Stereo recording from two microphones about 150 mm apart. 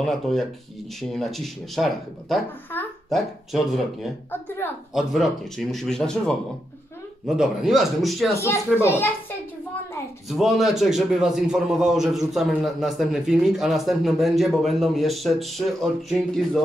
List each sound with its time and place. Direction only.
0.0 s a man's voice: centre (ahead or behind)
4.3 s speech: 15° left (ahead or behind)
4.9 s a man's voice: centre (ahead or behind)
8.8 s speech: 15° left (ahead or behind)
10.2 s a man's voice: centre (ahead or behind)